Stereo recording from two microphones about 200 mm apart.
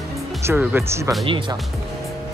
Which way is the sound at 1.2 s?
25° right (ahead or behind).